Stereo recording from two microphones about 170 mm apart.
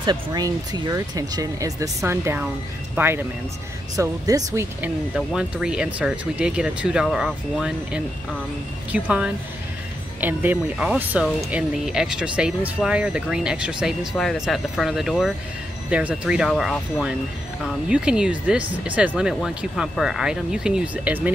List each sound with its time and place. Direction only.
0.0 s speech: 25° right (ahead or behind)
5.1 s speech: 5° right (ahead or behind)